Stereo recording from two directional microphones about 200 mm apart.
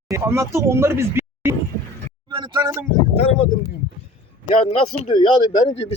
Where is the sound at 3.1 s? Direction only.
30° left (ahead or behind).